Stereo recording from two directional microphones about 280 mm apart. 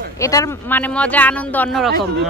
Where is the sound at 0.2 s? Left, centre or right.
Centre.